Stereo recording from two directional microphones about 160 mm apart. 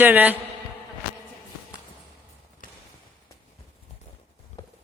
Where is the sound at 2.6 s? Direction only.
60° left (ahead or behind).